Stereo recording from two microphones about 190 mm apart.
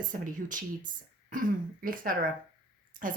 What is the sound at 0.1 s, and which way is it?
Speech, 45° right (ahead or behind).